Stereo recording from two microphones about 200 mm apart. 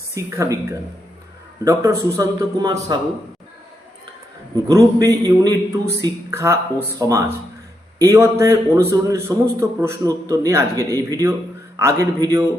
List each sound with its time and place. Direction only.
0.1 s a man's voice: 15° right (ahead or behind)
4.5 s a man's voice: 15° right (ahead or behind)